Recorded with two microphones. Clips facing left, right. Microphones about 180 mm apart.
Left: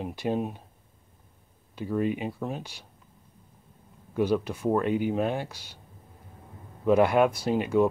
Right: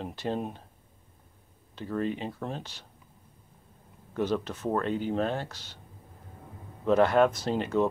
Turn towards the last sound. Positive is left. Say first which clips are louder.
# left 3 dB
turn(degrees=10)  # may be behind; listen again after turning